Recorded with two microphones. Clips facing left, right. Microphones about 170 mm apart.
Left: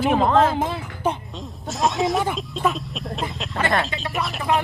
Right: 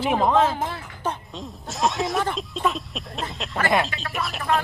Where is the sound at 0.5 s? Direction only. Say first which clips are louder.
Left 5 dB; 15° left (ahead or behind).